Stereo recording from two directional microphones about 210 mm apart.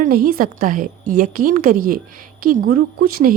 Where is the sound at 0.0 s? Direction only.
45° right (ahead or behind).